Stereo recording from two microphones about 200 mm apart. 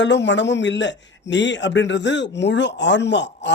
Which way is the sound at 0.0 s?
60° left (ahead or behind).